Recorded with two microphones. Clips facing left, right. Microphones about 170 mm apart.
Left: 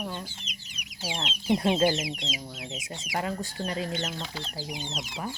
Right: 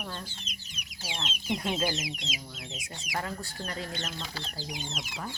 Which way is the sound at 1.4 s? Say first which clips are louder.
Left 7 dB; 30° left (ahead or behind).